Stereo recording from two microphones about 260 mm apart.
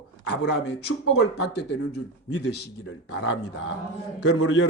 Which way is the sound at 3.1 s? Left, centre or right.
Left.